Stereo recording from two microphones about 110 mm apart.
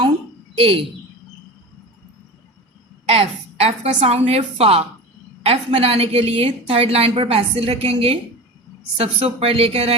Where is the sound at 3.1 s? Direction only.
65° right (ahead or behind).